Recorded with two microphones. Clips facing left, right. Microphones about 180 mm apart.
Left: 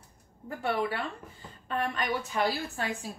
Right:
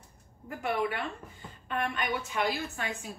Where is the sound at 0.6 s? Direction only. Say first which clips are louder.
Left 1 dB; 30° left (ahead or behind).